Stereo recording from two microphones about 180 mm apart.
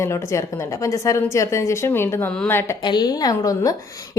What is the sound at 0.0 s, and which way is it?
A woman's voice, 15° left (ahead or behind).